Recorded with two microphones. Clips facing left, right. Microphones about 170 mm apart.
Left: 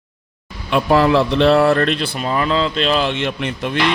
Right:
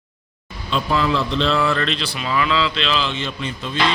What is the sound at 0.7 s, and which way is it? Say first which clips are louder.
Speech: left 6 dB; 60° left (ahead or behind).